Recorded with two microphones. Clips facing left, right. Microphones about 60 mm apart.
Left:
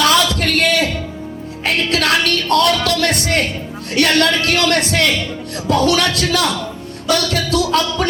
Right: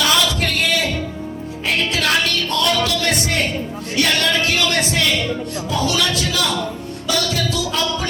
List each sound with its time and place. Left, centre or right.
0.0 s a sound: left
1.6 s music: left
3.9 s speech: left